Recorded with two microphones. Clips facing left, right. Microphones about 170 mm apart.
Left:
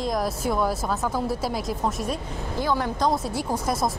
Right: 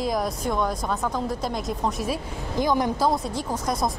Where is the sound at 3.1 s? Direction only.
5° left (ahead or behind).